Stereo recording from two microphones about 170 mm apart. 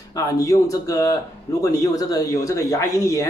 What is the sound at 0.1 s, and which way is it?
Speech, 20° left (ahead or behind).